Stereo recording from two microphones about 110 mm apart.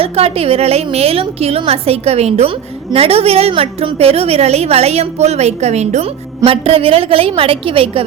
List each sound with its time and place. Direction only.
0.0 s a woman's voice: 60° right (ahead or behind)
3.5 s a woman's voice: 55° right (ahead or behind)